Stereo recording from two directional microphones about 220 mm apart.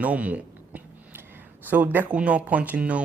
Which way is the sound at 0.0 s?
5° right (ahead or behind).